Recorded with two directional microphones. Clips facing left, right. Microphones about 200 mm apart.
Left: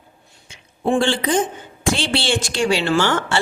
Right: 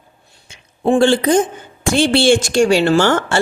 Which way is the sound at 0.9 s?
45° right (ahead or behind).